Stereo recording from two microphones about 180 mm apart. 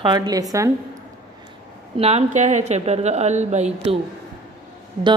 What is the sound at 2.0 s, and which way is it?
A woman's voice, 35° right (ahead or behind).